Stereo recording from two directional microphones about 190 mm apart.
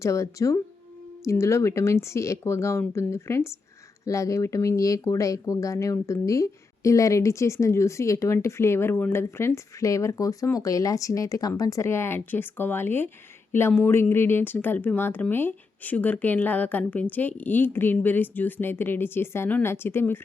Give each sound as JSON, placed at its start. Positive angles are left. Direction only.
{"t": 0.0, "sound": "speech", "side_deg": 15}